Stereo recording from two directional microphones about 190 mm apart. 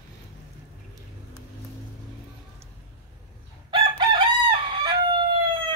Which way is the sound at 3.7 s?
25° right (ahead or behind).